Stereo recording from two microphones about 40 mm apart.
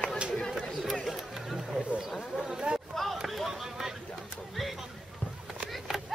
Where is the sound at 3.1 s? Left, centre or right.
Centre.